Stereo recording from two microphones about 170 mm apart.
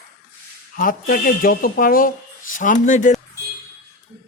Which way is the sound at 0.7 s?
55° left (ahead or behind).